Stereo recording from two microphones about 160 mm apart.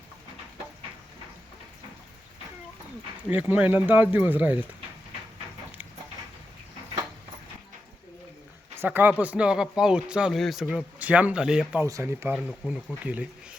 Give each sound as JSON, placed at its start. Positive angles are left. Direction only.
{"t": 3.2, "sound": "speech", "side_deg": -10}
{"t": 8.7, "sound": "speech", "side_deg": -15}
{"t": 11.9, "sound": "speech", "side_deg": -20}
{"t": 12.3, "sound": "speech", "side_deg": 5}
{"t": 13.1, "sound": "speech", "side_deg": -10}